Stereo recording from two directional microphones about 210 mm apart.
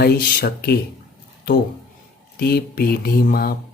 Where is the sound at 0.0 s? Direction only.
45° left (ahead or behind).